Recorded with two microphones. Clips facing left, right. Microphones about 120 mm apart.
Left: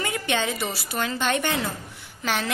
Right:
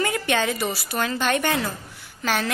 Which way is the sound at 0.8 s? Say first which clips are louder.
Right 1 dB; 20° left (ahead or behind).